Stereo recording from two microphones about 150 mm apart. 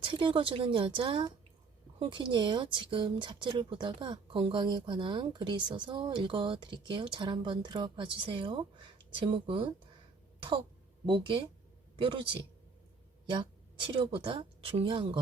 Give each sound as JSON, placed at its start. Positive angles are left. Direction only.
{"t": 0.0, "sound": "speech", "side_deg": -35}
{"t": 11.0, "sound": "a woman's voice", "side_deg": -35}